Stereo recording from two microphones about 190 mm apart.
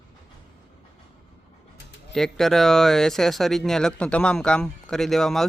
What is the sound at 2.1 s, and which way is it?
Speech, centre (ahead or behind).